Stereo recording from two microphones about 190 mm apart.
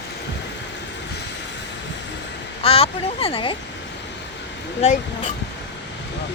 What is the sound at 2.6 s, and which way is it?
Speech, 30° left (ahead or behind).